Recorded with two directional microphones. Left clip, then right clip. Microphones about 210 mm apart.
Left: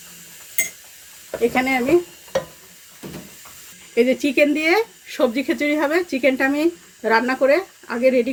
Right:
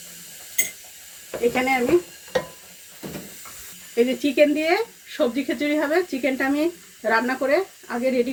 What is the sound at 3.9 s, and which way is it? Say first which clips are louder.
Speech: left 2 dB; 45° left (ahead or behind).